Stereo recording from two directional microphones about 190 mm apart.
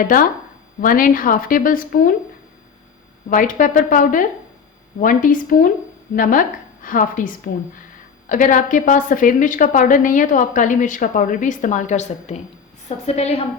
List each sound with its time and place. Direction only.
0.0 s a woman's voice: 45° left (ahead or behind)
3.2 s a woman's voice: 45° left (ahead or behind)